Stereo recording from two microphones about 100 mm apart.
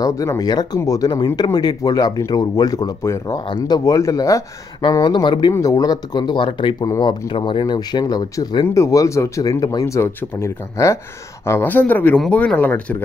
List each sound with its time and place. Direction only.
0.0 s speech: 35° left (ahead or behind)
3.0 s speech: 25° left (ahead or behind)
3.4 s speech: 45° left (ahead or behind)
5.0 s speech: 50° left (ahead or behind)
5.5 s speech: 35° left (ahead or behind)
8.6 s speech: 30° left (ahead or behind)